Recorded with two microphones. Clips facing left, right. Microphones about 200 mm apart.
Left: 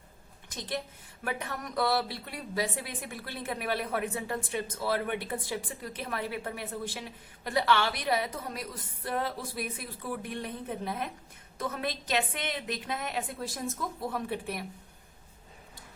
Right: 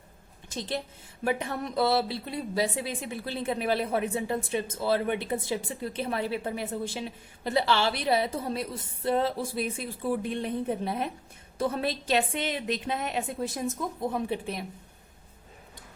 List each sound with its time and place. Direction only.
0.4 s a woman's voice: 25° right (ahead or behind)